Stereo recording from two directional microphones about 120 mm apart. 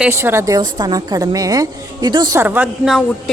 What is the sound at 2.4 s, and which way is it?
Speech, 15° right (ahead or behind).